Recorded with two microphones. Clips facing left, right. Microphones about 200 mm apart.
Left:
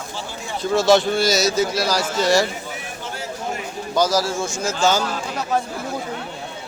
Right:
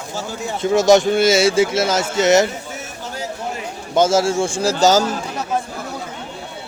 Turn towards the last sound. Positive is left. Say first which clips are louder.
# right 5 dB
turn(degrees=-40)  # may be behind; listen again after turning